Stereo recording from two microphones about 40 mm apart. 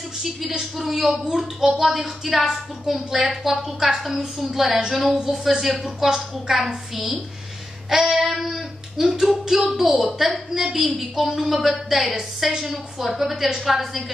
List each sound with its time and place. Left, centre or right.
0.2 s a woman's voice: centre